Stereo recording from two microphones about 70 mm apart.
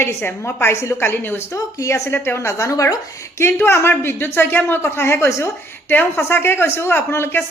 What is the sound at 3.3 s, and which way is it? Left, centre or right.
A woman's voice, left.